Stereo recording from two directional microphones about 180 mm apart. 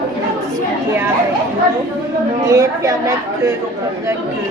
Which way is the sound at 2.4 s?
15° right (ahead or behind).